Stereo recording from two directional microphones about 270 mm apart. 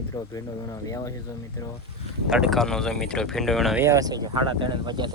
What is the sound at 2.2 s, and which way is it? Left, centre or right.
Speech, centre.